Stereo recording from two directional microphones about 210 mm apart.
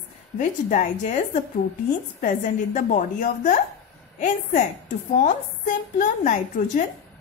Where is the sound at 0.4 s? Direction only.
35° left (ahead or behind).